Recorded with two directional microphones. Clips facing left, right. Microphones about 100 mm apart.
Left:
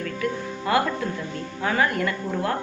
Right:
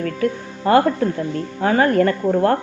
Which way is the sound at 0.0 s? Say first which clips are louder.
Right 6 dB; 40° right (ahead or behind).